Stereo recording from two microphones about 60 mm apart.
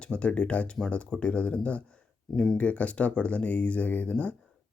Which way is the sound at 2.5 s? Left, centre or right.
Left.